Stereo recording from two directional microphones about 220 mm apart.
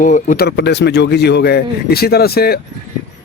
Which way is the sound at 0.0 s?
35° left (ahead or behind).